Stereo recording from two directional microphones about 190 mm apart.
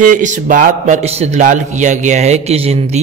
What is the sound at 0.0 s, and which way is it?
Speech, 45° right (ahead or behind).